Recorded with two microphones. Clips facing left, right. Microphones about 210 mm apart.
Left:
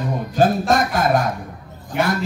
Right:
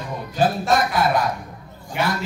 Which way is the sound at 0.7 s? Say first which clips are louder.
Left 2 dB; 45° left (ahead or behind).